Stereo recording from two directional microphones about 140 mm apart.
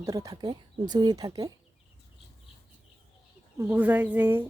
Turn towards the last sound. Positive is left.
turn(degrees=-15)  # may be behind; listen again after turning